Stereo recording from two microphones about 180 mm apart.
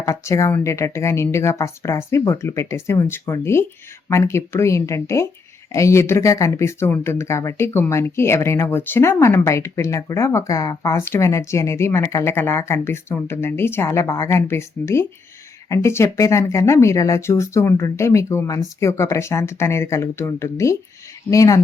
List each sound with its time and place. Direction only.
0.0 s speech: 15° left (ahead or behind)